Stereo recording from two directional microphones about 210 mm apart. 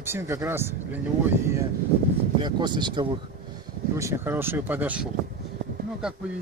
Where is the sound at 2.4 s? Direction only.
20° right (ahead or behind).